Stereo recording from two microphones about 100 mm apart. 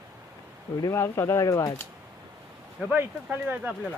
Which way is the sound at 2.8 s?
15° right (ahead or behind).